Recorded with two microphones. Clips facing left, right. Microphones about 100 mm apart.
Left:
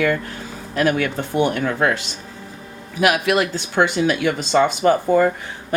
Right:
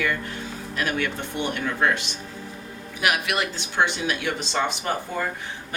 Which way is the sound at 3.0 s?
45° left (ahead or behind).